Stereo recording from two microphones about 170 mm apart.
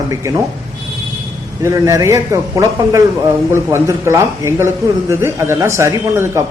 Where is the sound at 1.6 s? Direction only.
20° right (ahead or behind).